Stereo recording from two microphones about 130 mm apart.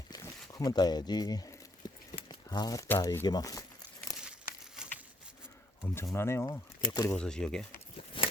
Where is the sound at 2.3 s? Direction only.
30° left (ahead or behind).